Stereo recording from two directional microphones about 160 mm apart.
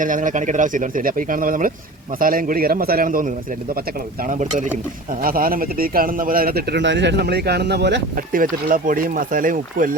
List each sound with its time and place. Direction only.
0.0 s speech: 55° right (ahead or behind)
5.2 s speech: 65° right (ahead or behind)